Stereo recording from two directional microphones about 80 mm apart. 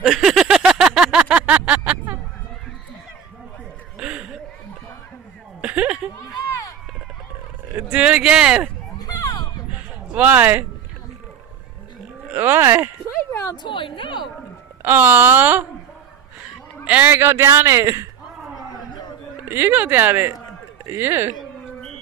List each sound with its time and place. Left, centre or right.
0.0 s a sound: centre; by 2.1 s right
4.0 s a sound: centre
5.6 s a sound: centre
7.7 s speech: centre
8.9 s a sound: left
10.0 s a man's voice: centre
12.4 s a man's voice: right
13.3 s speech: left
13.6 s speech: left
14.8 s a man's voice: right
16.8 s a man's voice: right
19.4 s a man's voice: right